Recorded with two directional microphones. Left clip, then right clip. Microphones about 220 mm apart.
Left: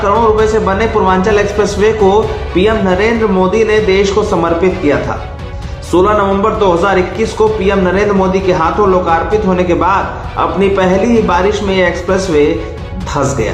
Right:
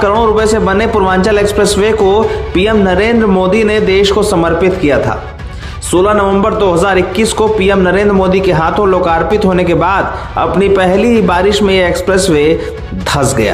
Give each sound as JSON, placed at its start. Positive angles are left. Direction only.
{"t": 0.3, "sound": "a man's voice", "side_deg": -40}